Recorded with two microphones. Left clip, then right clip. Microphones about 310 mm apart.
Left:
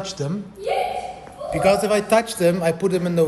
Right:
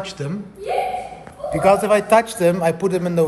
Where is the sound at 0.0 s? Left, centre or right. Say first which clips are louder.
Even; centre.